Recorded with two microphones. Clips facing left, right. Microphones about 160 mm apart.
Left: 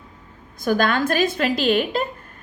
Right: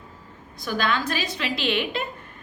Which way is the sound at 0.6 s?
50° left (ahead or behind).